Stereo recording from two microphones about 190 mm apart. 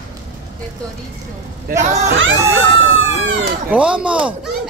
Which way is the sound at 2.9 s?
90° right.